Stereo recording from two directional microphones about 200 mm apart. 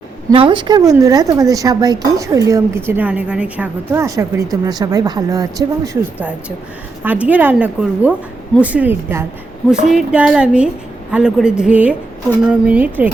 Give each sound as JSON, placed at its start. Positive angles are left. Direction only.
{"t": 0.3, "sound": "a woman's voice", "side_deg": -25}